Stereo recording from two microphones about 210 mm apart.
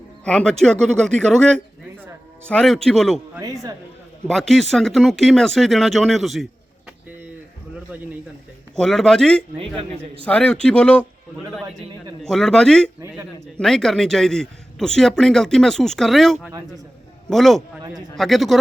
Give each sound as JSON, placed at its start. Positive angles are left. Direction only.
{"t": 0.3, "sound": "speech", "side_deg": 5}
{"t": 3.3, "sound": "a man's voice", "side_deg": -15}
{"t": 4.3, "sound": "speech", "side_deg": 0}
{"t": 8.7, "sound": "speech", "side_deg": 0}
{"t": 9.6, "sound": "a man's voice", "side_deg": -25}
{"t": 10.2, "sound": "speech", "side_deg": 5}
{"t": 12.2, "sound": "speech", "side_deg": 5}